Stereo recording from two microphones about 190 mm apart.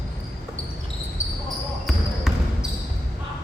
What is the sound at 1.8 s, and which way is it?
Basketball bounce, centre (ahead or behind).